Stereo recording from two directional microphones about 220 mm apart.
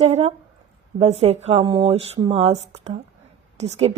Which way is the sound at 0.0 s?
25° right (ahead or behind).